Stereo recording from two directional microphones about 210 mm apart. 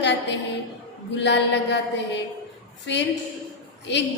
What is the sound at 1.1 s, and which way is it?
A woman's voice, 55° left (ahead or behind).